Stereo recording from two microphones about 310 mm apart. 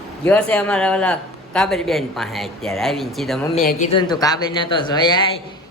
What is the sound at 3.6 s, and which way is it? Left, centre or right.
Speech, left.